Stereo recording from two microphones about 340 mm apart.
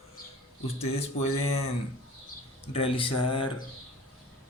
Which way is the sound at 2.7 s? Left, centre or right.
Centre.